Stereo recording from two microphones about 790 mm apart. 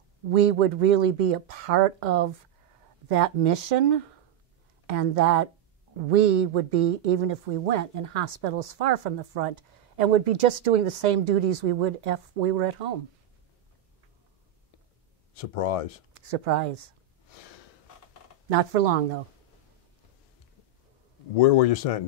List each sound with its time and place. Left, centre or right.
0.3 s speech: right
15.3 s speech: left
16.1 s speech: right
18.5 s speech: right
21.4 s speech: left